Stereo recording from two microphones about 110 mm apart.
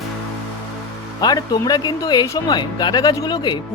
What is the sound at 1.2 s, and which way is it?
Speech, 40° left (ahead or behind).